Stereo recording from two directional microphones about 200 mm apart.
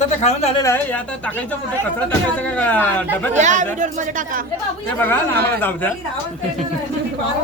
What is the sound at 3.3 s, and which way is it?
Speech, 35° right (ahead or behind).